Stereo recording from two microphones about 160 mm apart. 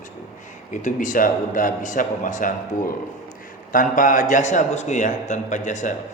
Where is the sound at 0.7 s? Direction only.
50° left (ahead or behind).